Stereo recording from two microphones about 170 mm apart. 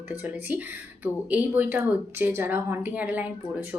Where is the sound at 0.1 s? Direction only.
10° right (ahead or behind).